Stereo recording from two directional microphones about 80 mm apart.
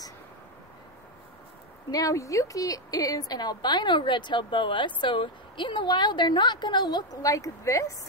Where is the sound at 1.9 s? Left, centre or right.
Left.